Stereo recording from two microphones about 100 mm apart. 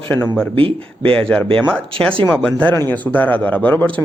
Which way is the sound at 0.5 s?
65° right (ahead or behind).